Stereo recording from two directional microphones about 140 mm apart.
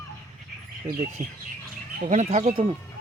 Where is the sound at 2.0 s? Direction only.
60° right (ahead or behind).